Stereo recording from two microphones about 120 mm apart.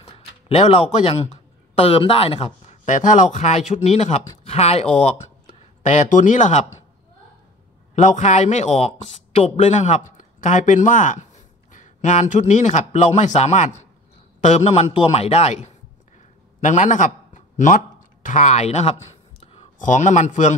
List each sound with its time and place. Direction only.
0.0 s speech: 55° left (ahead or behind); by 4.2 s 70° left (ahead or behind)
4.5 s a man's voice: 60° left (ahead or behind)
5.8 s speech: 85° left
7.9 s speech: 85° left
10.1 s a man's voice: 90° left; by 15.7 s 65° left (ahead or behind)
16.2 s a sound: 85° left
18.2 s speech: 75° left (ahead or behind); by 20.5 s 90° left